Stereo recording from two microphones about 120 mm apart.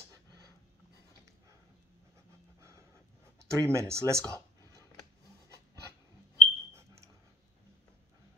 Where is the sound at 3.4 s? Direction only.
25° right (ahead or behind).